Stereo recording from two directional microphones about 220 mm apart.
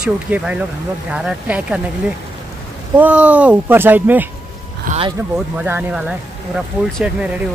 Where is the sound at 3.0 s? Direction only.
5° right (ahead or behind).